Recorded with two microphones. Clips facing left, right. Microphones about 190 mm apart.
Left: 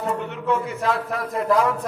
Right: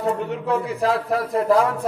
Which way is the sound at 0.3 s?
35° right (ahead or behind).